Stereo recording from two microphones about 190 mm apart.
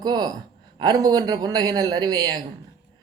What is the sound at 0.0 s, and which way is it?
A man's voice, 20° right (ahead or behind).